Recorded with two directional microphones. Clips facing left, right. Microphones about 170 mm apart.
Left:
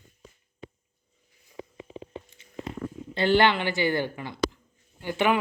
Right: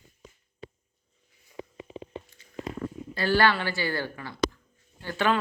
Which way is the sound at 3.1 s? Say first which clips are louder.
Left 2 dB; 20° left (ahead or behind).